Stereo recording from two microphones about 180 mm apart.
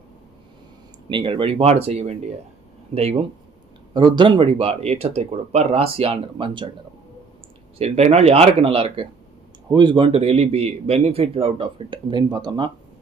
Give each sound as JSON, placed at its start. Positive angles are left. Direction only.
{"t": 1.1, "sound": "a man's voice", "side_deg": -30}
{"t": 7.8, "sound": "a man's voice", "side_deg": -35}